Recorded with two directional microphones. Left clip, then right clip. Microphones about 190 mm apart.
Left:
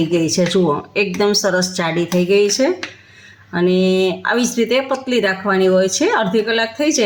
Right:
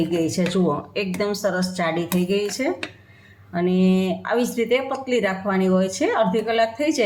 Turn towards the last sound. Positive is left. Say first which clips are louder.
# left 3 dB
turn(degrees=50)  # may be behind; listen again after turning